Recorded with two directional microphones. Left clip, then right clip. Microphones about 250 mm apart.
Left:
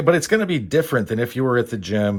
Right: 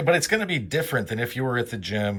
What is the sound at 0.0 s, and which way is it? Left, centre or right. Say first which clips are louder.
Speech: left 4 dB; centre.